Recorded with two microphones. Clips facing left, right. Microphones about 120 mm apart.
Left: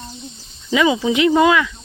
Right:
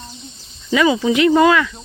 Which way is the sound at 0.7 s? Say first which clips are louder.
Right 1 dB; 15° left (ahead or behind).